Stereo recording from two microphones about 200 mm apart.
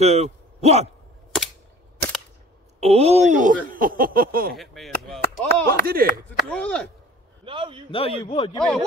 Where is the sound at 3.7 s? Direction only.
45° right (ahead or behind).